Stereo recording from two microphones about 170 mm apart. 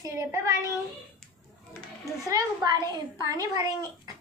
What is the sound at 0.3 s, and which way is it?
Speech, 20° right (ahead or behind).